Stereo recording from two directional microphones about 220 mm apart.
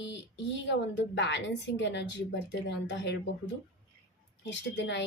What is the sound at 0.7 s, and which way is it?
A woman's voice, 55° left (ahead or behind).